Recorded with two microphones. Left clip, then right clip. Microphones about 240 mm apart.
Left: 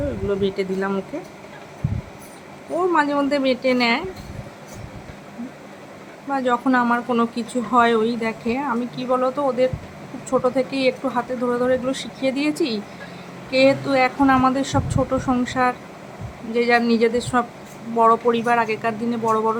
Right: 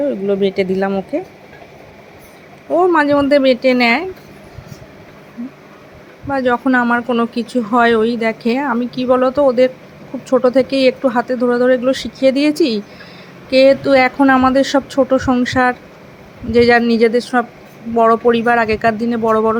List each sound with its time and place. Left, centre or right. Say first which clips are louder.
0.3 s speech: right 5 dB; centre
2.7 s speech: right 7 dB; right
6.3 s speech: right 5 dB; centre